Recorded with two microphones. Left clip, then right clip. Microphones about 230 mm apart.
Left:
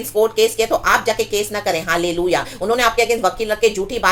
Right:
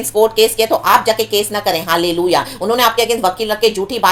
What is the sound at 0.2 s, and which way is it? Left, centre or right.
A woman's voice, centre.